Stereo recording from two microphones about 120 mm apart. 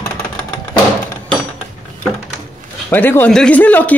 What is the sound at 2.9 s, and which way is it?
Speech, 15° left (ahead or behind).